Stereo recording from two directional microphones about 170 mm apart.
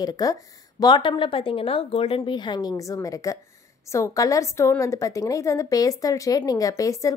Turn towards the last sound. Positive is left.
turn(degrees=20)  # may be behind; listen again after turning